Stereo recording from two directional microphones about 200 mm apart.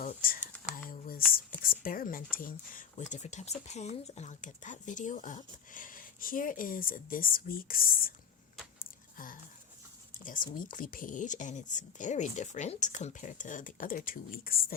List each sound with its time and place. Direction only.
0.0 s a sound: 45° left (ahead or behind)
1.3 s speech: 45° left (ahead or behind)
9.1 s speech: 45° left (ahead or behind)